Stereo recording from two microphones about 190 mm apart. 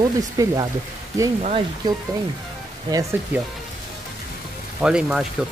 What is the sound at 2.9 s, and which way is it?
Speech, 15° right (ahead or behind).